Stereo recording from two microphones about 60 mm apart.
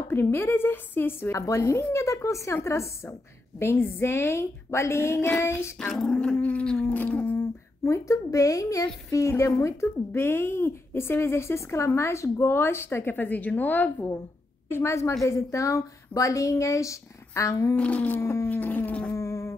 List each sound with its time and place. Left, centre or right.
0.1 s a woman's voice: left
1.3 s a woman's voice: left
1.8 s a woman's voice: left
2.0 s speech: left
6.0 s dog: centre
6.9 s a sound: left
7.3 s speech: left
9.3 s speech: left
14.7 s a woman's voice: left
17.7 s insect: left
18.2 s speech: left
18.5 s insect: left
19.1 s insect: left